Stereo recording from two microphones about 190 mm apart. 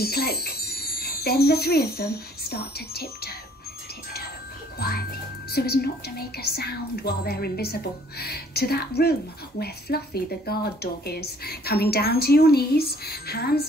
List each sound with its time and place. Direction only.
0.0 s speech: 55° left (ahead or behind)
4.7 s a woman's voice: 55° left (ahead or behind)